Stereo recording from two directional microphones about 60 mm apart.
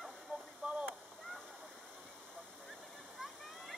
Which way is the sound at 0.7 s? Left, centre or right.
Centre.